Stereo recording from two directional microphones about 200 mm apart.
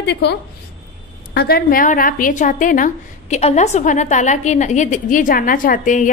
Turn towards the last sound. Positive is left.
turn(degrees=40)  # may be behind; listen again after turning